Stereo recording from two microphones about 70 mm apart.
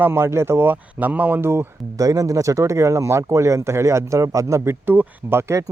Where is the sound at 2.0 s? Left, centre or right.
Right.